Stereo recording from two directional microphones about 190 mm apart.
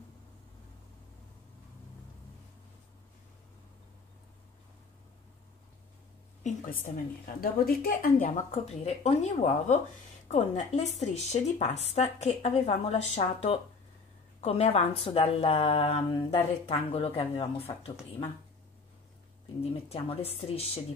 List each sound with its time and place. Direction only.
6.4 s speech: 40° left (ahead or behind)
7.3 s speech: 50° left (ahead or behind); by 17.6 s 30° left (ahead or behind)
19.7 s speech: 30° left (ahead or behind)